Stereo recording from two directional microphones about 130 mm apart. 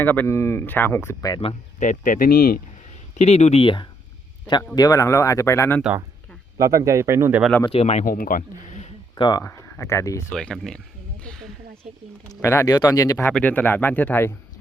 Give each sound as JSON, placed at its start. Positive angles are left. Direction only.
{"t": 0.0, "sound": "speech", "side_deg": 15}
{"t": 1.8, "sound": "speech", "side_deg": 85}
{"t": 3.2, "sound": "speech", "side_deg": 60}
{"t": 6.6, "sound": "speech", "side_deg": -25}
{"t": 7.6, "sound": "speech", "side_deg": 50}
{"t": 9.1, "sound": "speech", "side_deg": 35}
{"t": 9.4, "sound": "speech", "side_deg": 20}
{"t": 10.3, "sound": "speech", "side_deg": 5}
{"t": 11.2, "sound": "a sound", "side_deg": 5}
{"t": 12.3, "sound": "speech", "side_deg": 20}
{"t": 13.3, "sound": "speech", "side_deg": 10}